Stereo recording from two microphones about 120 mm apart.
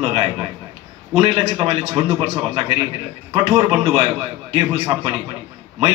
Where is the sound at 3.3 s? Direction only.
45° right (ahead or behind).